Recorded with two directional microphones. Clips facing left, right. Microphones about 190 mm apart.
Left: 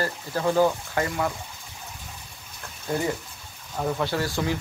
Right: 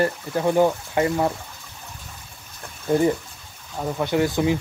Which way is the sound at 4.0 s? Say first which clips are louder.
Right 5 dB; 20° right (ahead or behind).